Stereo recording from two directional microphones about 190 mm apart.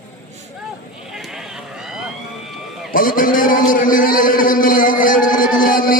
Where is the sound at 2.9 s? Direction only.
45° left (ahead or behind).